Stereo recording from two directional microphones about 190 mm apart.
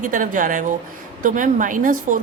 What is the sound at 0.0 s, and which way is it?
A woman's voice, 45° right (ahead or behind).